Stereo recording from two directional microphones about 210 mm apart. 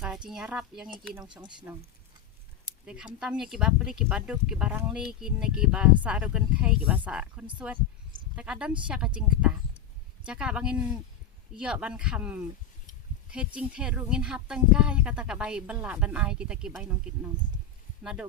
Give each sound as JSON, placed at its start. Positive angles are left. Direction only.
{"t": 0.0, "sound": "speech", "side_deg": -5}
{"t": 1.3, "sound": "speech", "side_deg": -20}
{"t": 2.8, "sound": "speech", "side_deg": -5}
{"t": 18.0, "sound": "speech", "side_deg": -5}